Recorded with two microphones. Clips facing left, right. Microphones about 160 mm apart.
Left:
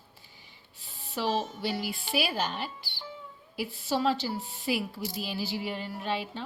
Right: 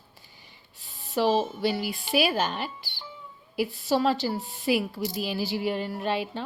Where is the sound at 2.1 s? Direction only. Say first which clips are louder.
Right 6 dB; 90° right.